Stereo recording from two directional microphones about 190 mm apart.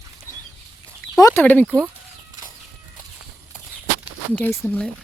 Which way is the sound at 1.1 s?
15° left (ahead or behind).